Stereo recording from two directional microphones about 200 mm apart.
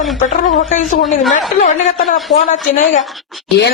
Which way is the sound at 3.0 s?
Centre (ahead or behind).